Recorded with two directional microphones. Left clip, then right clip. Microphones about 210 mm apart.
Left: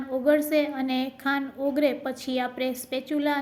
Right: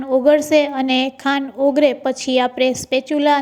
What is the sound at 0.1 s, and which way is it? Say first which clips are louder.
A woman's voice: right 10 dB; 35° right (ahead or behind).